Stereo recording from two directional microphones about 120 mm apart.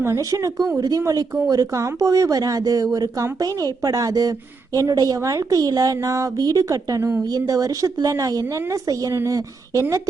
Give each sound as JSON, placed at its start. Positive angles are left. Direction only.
{"t": 0.0, "sound": "speech", "side_deg": -25}